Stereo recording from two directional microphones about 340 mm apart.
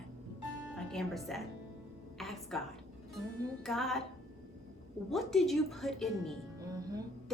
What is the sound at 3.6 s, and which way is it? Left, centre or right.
Speech, centre.